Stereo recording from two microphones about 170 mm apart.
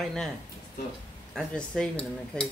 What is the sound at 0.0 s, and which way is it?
Speech, centre (ahead or behind).